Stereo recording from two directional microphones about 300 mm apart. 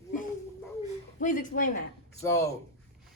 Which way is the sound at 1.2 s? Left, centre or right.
Left.